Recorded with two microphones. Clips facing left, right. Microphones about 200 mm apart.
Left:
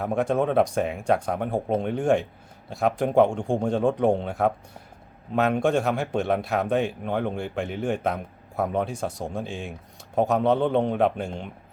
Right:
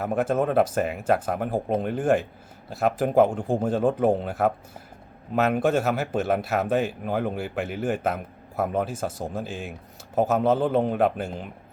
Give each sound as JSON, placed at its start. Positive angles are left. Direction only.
{"t": 0.0, "sound": "speech", "side_deg": -5}